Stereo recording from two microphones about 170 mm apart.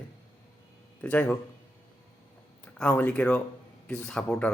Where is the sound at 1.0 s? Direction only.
10° left (ahead or behind).